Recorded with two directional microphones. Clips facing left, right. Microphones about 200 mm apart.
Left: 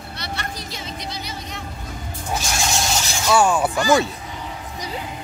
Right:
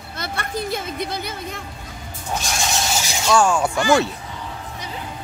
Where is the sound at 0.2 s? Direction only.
55° right (ahead or behind).